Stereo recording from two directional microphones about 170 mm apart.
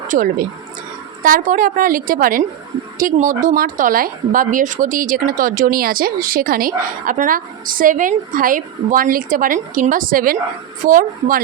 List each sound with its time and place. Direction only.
0.1 s a woman's voice: 55° right (ahead or behind)